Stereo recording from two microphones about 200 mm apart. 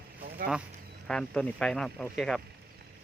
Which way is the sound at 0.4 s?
45° right (ahead or behind).